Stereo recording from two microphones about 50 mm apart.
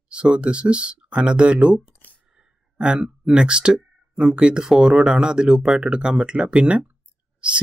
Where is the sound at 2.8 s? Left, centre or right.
Centre.